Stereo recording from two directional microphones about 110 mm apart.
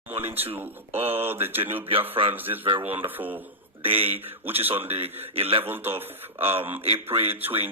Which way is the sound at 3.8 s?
65° right (ahead or behind).